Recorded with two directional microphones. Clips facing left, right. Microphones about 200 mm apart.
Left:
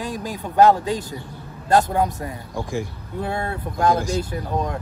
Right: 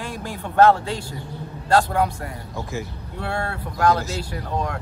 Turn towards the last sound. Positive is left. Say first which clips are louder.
# left 2 dB
turn(degrees=20)  # may be behind; listen again after turning